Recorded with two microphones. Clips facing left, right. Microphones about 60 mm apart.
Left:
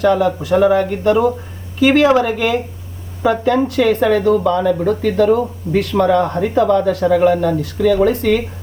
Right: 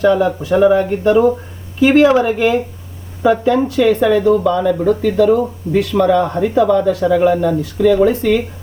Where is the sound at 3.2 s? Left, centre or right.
Centre.